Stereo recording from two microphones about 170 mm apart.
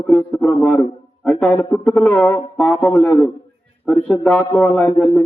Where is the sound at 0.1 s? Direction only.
Centre (ahead or behind).